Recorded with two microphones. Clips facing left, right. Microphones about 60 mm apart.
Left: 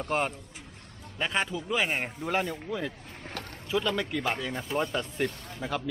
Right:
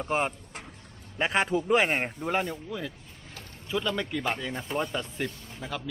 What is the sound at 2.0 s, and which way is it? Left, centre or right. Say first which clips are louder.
Speech: right 1 dB; centre.